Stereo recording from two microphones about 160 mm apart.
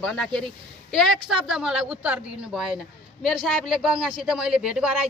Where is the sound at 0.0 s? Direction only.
5° left (ahead or behind).